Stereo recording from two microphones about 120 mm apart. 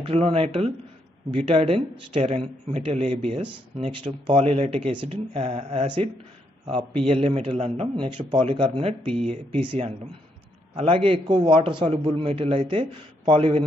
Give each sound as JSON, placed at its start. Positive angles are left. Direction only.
{"t": 0.0, "sound": "a man's voice", "side_deg": -55}
{"t": 7.9, "sound": "a man's voice", "side_deg": -45}